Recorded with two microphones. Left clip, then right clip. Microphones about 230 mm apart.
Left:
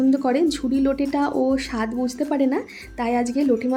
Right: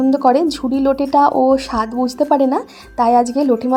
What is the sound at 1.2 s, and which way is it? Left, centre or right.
Speech, centre.